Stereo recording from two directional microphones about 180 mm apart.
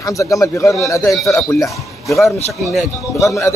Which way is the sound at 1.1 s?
Centre (ahead or behind).